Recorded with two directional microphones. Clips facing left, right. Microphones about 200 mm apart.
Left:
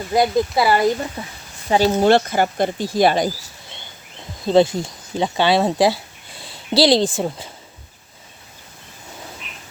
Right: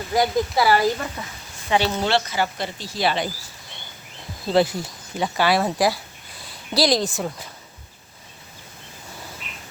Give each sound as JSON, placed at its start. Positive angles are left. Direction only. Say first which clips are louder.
{"t": 0.1, "sound": "speech", "louder": "left 3 dB", "side_deg": 20}
{"t": 1.7, "sound": "speech", "louder": "left 6 dB", "side_deg": 40}
{"t": 4.4, "sound": "speech", "louder": "left 5 dB", "side_deg": 25}